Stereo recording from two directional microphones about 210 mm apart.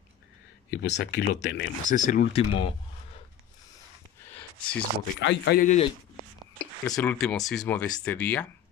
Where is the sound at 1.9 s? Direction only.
40° left (ahead or behind).